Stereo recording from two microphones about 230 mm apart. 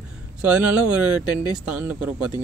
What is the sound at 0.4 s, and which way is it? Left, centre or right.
Speech, centre.